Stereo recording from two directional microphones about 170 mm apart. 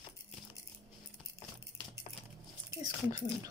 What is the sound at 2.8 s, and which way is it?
Speech, 20° right (ahead or behind).